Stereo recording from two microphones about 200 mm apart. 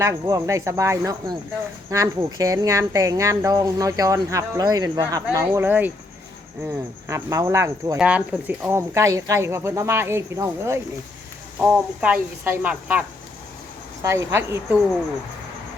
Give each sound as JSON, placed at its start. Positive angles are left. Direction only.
{"t": 0.0, "sound": "speech", "side_deg": -15}